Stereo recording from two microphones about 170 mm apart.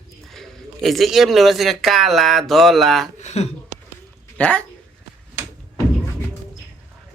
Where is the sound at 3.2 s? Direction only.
40° left (ahead or behind).